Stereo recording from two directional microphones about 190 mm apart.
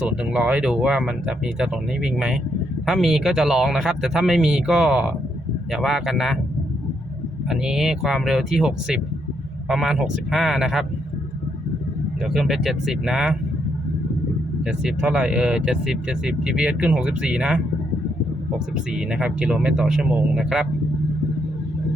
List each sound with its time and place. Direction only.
0.3 s speech: 5° right (ahead or behind)
7.5 s speech: 5° right (ahead or behind)
12.2 s speech: centre (ahead or behind)
14.6 s speech: 5° right (ahead or behind)
18.9 s speech: 5° right (ahead or behind)